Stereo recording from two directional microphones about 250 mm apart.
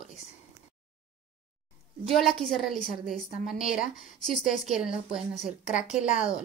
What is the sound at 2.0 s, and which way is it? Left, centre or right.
A woman's voice, centre.